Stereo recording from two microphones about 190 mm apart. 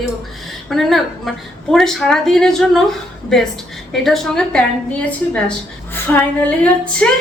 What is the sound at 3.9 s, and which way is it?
A woman's voice, centre (ahead or behind).